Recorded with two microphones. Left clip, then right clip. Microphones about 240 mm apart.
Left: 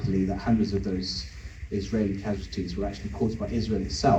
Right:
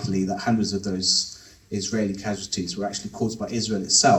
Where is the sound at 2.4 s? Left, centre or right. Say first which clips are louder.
Right 4 dB; right.